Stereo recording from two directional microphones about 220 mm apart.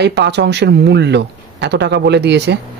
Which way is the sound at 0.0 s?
50° right (ahead or behind).